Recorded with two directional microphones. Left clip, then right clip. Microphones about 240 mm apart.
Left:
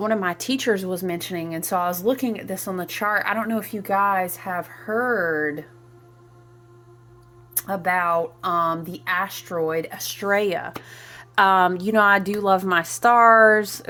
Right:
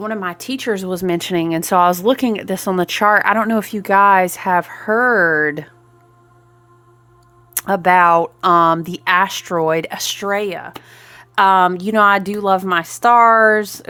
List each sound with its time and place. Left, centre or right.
0.0 s speech: centre
0.9 s speech: right
7.5 s speech: right
10.2 s speech: centre